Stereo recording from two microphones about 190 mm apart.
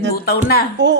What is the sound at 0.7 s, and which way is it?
Speech, 65° right (ahead or behind).